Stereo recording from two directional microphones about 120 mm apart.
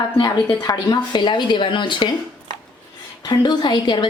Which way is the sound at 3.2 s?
35° left (ahead or behind).